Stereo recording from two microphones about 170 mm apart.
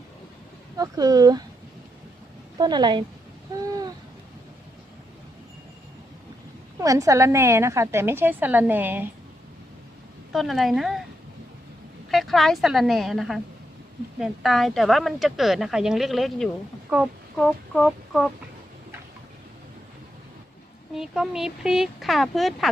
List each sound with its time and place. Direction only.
0.8 s speech: 20° right (ahead or behind)
2.6 s speech: 25° right (ahead or behind)
6.7 s a woman's voice: 20° right (ahead or behind)
10.3 s a woman's voice: centre (ahead or behind)
12.1 s a woman's voice: centre (ahead or behind)
20.9 s a woman's voice: 5° right (ahead or behind)